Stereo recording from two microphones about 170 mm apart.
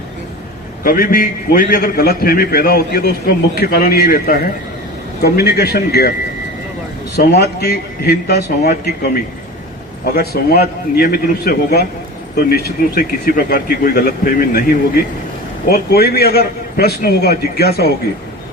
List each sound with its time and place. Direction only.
0.9 s a man's voice: 55° left (ahead or behind)
5.2 s a man's voice: 70° left (ahead or behind)
7.2 s a man's voice: 70° left (ahead or behind); by 15.0 s 55° left (ahead or behind)
15.7 s a man's voice: 65° left (ahead or behind)